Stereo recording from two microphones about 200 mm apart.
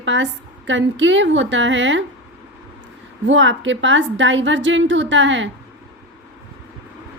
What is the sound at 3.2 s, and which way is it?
A woman's voice, 70° right (ahead or behind).